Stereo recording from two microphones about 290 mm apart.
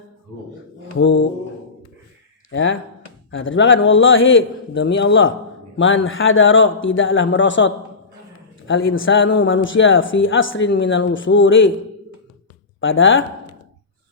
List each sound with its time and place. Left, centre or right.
0.9 s speech: left
2.5 s speech: left
12.8 s speech: left